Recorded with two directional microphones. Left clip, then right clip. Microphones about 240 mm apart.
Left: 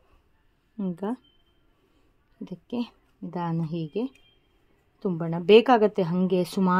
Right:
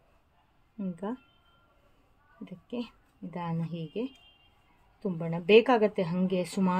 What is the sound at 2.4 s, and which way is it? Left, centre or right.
A woman's voice, left.